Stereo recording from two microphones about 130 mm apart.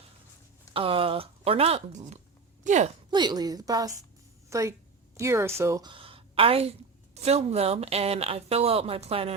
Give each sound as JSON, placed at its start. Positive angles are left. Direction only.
{"t": 0.7, "sound": "speech", "side_deg": -45}
{"t": 2.6, "sound": "speech", "side_deg": -65}
{"t": 3.1, "sound": "a woman's voice", "side_deg": -35}
{"t": 5.8, "sound": "a woman's voice", "side_deg": -40}